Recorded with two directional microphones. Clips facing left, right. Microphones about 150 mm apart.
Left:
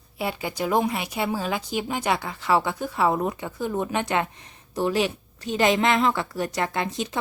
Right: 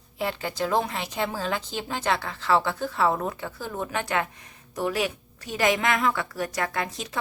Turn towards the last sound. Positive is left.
turn(degrees=25)  # may be behind; listen again after turning